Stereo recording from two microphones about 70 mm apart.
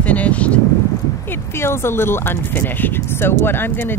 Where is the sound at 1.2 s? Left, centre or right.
Left.